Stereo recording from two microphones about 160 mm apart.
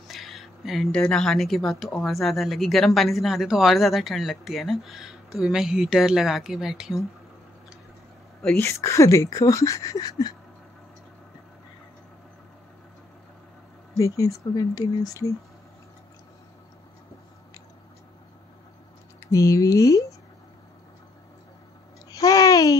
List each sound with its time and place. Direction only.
0.1 s a woman's voice: centre (ahead or behind)
8.4 s a woman's voice: 5° left (ahead or behind)
8.6 s speech: 20° left (ahead or behind)
13.9 s speech: 20° left (ahead or behind)
19.1 s speech: 20° left (ahead or behind)
22.1 s babbling: 20° left (ahead or behind)